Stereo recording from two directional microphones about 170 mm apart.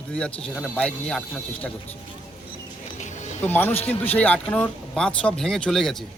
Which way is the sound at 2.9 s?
40° left (ahead or behind).